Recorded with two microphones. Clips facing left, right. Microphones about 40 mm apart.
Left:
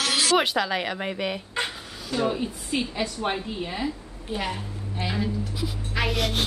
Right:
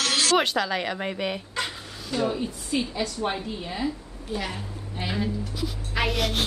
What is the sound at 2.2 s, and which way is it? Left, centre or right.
A woman's voice, centre.